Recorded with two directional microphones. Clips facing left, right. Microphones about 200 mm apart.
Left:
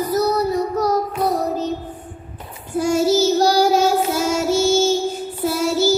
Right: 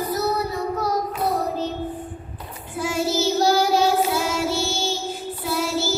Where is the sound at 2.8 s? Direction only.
45° left (ahead or behind).